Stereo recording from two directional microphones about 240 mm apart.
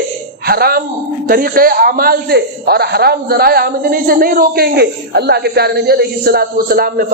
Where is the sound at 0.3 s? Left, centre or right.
Right.